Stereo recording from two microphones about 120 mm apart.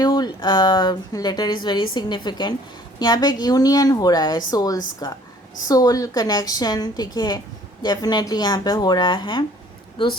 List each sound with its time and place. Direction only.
0.0 s a woman's voice: 35° left (ahead or behind)